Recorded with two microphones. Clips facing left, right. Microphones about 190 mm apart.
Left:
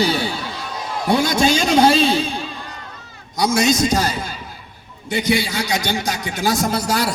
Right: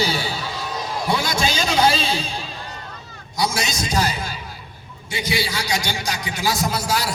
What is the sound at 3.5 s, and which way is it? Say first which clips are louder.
Speech: left 7 dB; 45° left (ahead or behind).